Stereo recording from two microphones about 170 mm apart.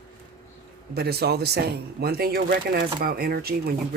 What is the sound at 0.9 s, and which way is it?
Speech, 70° right (ahead or behind).